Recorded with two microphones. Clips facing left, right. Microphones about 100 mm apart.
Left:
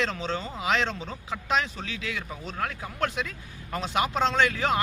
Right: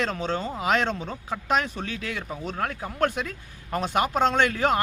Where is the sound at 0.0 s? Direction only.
45° right (ahead or behind).